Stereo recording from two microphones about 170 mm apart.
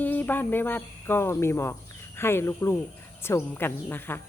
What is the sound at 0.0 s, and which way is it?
Speech, 10° left (ahead or behind).